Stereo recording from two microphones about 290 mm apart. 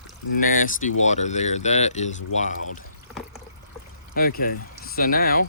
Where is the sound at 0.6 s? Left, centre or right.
Left.